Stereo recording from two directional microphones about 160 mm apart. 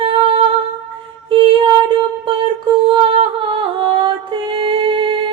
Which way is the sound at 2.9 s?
35° right (ahead or behind).